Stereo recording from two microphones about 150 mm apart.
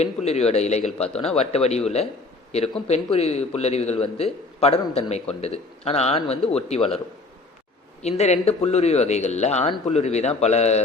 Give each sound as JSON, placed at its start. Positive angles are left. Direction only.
{"t": 0.0, "sound": "a man's voice", "side_deg": 45}
{"t": 2.8, "sound": "a man's voice", "side_deg": 45}
{"t": 8.0, "sound": "a man's voice", "side_deg": 45}